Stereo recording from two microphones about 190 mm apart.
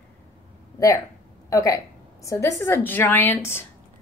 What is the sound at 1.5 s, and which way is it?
Speech, 15° left (ahead or behind).